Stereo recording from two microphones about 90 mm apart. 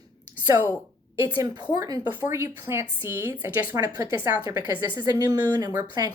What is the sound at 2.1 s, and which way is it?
A woman's voice, 25° right (ahead or behind).